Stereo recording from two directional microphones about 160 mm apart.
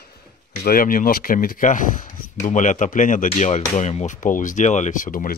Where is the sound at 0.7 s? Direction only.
60° left (ahead or behind).